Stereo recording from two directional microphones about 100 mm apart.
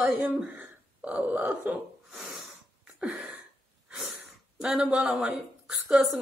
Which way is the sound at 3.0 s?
15° right (ahead or behind).